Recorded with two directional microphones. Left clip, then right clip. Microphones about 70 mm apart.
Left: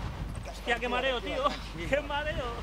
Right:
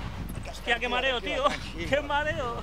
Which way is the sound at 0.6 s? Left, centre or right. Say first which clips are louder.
Right 3 dB; centre.